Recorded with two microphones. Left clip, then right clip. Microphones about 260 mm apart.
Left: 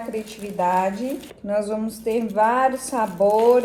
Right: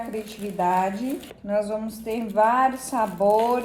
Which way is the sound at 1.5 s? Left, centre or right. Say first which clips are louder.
Left 1 dB; centre.